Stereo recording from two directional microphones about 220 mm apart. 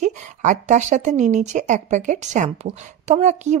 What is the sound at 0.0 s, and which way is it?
A woman's voice, 35° right (ahead or behind).